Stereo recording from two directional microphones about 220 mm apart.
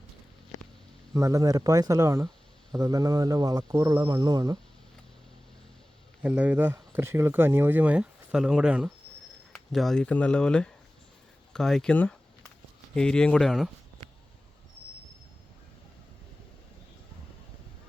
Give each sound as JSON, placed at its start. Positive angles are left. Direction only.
{"t": 1.1, "sound": "speech", "side_deg": -15}
{"t": 6.2, "sound": "speech", "side_deg": -5}